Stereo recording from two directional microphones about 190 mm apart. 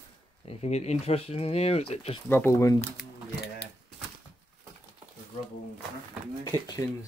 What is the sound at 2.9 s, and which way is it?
Typewriter, 60° left (ahead or behind).